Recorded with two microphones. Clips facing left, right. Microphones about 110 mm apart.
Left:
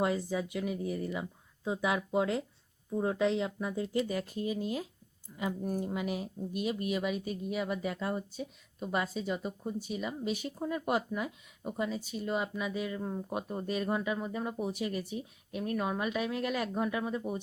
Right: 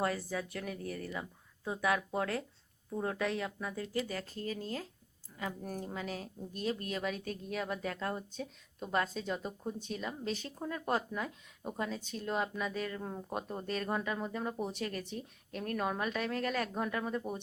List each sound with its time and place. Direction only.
0.0 s a woman's voice: 15° left (ahead or behind)